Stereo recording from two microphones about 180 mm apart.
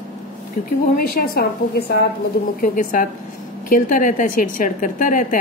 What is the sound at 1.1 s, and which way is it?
Speech, 55° left (ahead or behind).